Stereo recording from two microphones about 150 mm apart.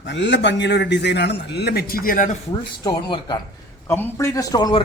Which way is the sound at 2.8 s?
30° left (ahead or behind).